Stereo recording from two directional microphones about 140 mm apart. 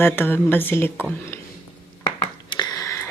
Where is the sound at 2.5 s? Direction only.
30° left (ahead or behind).